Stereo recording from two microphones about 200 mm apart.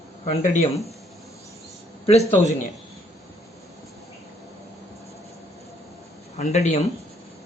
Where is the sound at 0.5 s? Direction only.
35° left (ahead or behind).